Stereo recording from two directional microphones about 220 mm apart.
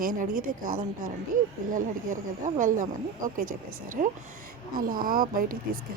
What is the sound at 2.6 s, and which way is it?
Speech, 35° right (ahead or behind).